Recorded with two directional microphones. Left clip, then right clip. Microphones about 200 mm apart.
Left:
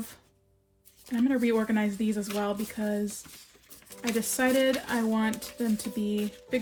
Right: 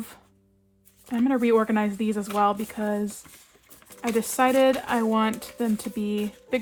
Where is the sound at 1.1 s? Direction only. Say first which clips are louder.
Right 5 dB; 35° right (ahead or behind).